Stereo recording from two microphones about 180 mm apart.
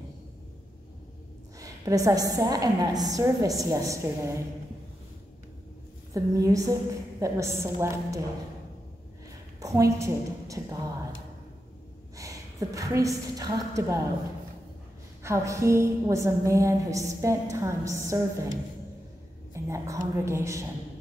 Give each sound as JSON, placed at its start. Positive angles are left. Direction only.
{"t": 1.6, "sound": "a woman's voice", "side_deg": -20}
{"t": 6.1, "sound": "a woman's voice", "side_deg": -20}
{"t": 9.6, "sound": "a woman's voice", "side_deg": -20}
{"t": 12.2, "sound": "a woman's voice", "side_deg": -20}
{"t": 15.2, "sound": "a woman's voice", "side_deg": -15}
{"t": 19.5, "sound": "a woman's voice", "side_deg": -15}